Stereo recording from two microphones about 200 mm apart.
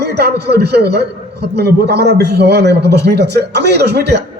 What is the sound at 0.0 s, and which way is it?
A man's voice, 55° right (ahead or behind).